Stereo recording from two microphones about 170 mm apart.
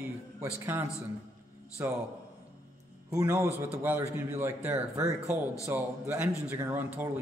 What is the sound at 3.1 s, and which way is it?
A man's voice, 15° right (ahead or behind).